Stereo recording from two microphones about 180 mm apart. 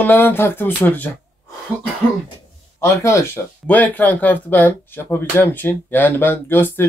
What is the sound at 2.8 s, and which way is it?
Speech, 15° left (ahead or behind).